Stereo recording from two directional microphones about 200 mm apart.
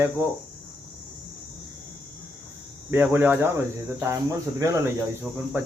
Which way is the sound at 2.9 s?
10° right (ahead or behind).